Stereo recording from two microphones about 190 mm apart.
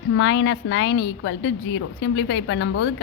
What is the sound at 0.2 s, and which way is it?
A woman's voice, 75° left (ahead or behind).